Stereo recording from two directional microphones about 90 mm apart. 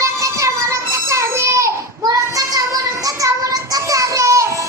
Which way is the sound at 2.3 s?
40° right (ahead or behind).